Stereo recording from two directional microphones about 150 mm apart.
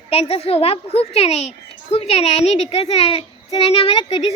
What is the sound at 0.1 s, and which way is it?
A child's voice, 40° left (ahead or behind).